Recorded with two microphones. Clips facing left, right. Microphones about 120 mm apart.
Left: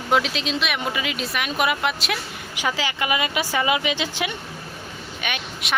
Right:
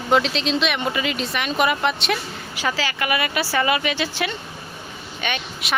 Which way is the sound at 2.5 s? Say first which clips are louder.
Right 1 dB; 15° left (ahead or behind).